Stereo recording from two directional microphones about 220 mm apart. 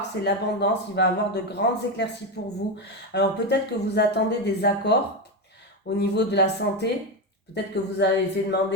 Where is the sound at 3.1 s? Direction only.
50° left (ahead or behind).